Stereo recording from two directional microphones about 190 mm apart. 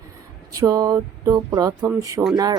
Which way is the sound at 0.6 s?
20° right (ahead or behind).